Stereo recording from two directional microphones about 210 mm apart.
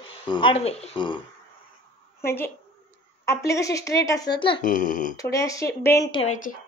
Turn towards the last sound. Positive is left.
turn(degrees=25)  # may be behind; listen again after turning